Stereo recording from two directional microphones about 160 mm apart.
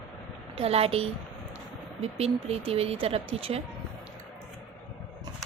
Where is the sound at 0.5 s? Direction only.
40° right (ahead or behind).